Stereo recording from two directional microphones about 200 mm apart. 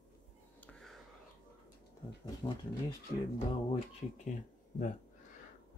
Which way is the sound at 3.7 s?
35° left (ahead or behind).